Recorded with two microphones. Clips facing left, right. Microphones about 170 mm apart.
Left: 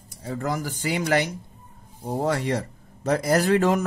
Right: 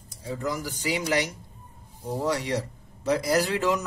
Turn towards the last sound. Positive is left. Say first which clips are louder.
# left 4 dB
turn(degrees=50)  # may be behind; listen again after turning